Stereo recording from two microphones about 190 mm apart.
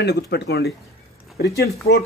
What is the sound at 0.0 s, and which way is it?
Speech, 60° left (ahead or behind).